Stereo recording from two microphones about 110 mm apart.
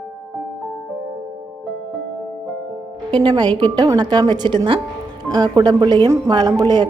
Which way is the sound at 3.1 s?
45° right (ahead or behind).